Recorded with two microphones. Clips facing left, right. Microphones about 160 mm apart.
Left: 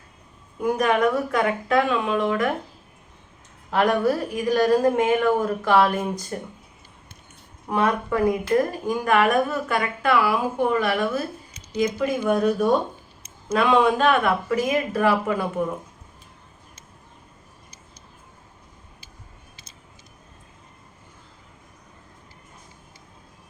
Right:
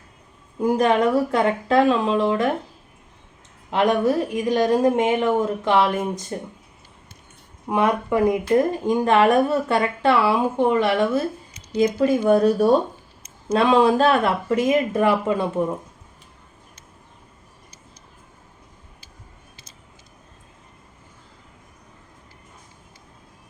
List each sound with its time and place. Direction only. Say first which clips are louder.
0.6 s speech: right 2 dB; 30° right (ahead or behind)
3.7 s speech: right 1 dB; 20° right (ahead or behind)
7.7 s speech: right 2 dB; 15° right (ahead or behind)